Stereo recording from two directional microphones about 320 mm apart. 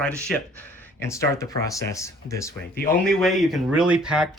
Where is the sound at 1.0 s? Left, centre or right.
Centre.